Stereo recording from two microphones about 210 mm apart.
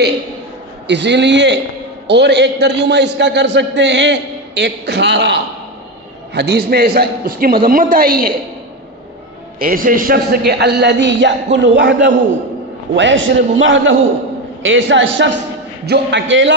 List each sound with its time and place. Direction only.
0.8 s a man's voice: 55° right (ahead or behind)
9.6 s a man's voice: 40° right (ahead or behind); by 16.5 s 60° right (ahead or behind)